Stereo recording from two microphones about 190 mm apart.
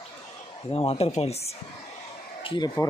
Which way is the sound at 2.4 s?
20° left (ahead or behind).